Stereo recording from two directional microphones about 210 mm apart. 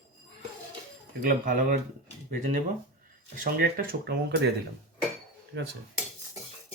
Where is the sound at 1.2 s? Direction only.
40° right (ahead or behind).